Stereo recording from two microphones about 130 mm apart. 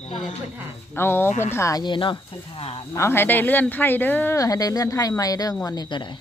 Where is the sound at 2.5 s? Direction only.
50° left (ahead or behind).